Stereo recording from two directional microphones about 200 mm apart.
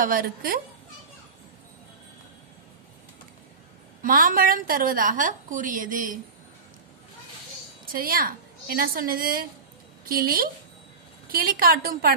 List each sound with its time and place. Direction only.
0.0 s a woman's voice: 45° right (ahead or behind)
4.0 s a woman's voice: 45° right (ahead or behind)
8.0 s a woman's voice: 45° right (ahead or behind)